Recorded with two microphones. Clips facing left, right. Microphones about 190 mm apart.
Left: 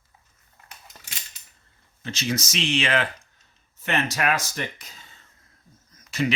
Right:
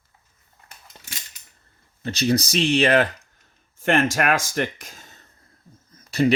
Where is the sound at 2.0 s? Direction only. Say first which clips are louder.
Right 7 dB; 35° right (ahead or behind).